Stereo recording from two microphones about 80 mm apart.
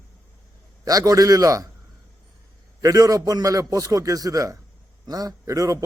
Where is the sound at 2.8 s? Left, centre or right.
Right.